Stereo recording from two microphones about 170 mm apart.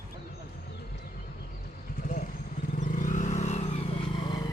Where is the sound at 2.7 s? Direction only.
50° left (ahead or behind); by 4.5 s 25° left (ahead or behind).